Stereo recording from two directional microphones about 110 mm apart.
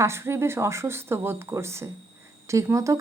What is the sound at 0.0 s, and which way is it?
A woman's voice, 25° right (ahead or behind).